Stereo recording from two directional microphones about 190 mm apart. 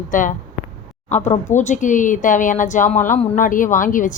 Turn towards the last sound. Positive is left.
turn(degrees=45)  # may be behind; listen again after turning